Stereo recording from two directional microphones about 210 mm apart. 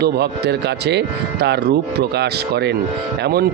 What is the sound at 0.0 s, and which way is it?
Speech, 50° right (ahead or behind).